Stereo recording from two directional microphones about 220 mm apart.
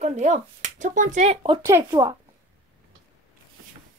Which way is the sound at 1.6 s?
15° right (ahead or behind).